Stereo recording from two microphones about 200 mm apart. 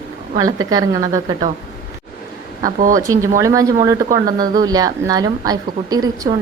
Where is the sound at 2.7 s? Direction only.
40° right (ahead or behind).